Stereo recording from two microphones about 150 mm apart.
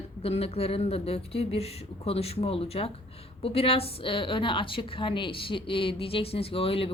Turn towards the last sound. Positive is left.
turn(degrees=40)  # may be behind; listen again after turning